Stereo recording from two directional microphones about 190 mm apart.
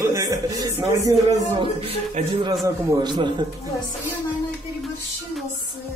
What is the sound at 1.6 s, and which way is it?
Speech, 30° right (ahead or behind).